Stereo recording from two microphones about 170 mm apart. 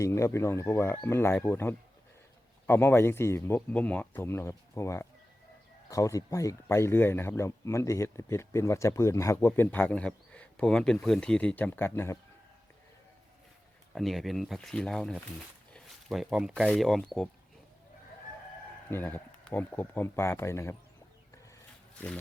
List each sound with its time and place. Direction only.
0.0 s speech: 15° left (ahead or behind)
13.9 s speech: centre (ahead or behind)
18.9 s speech: 10° left (ahead or behind)